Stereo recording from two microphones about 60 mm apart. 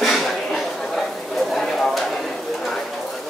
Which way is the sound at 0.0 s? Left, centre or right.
Centre.